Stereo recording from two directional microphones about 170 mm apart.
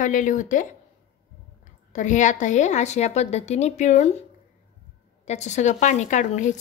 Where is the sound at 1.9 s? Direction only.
45° left (ahead or behind).